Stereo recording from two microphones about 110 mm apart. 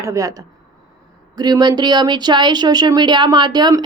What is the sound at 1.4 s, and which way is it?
Speech, 40° right (ahead or behind).